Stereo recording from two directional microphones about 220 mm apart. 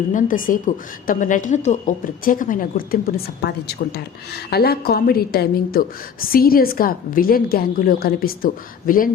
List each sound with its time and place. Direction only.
0.1 s a woman's voice: 35° left (ahead or behind)